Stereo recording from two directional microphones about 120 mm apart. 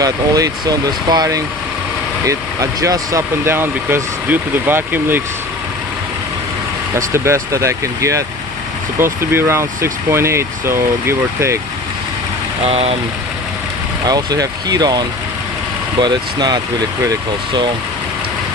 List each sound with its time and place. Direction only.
0.0 s speech: 30° right (ahead or behind)
6.9 s speech: 25° right (ahead or behind)
12.6 s speech: 55° right (ahead or behind)
14.1 s speech: 35° right (ahead or behind)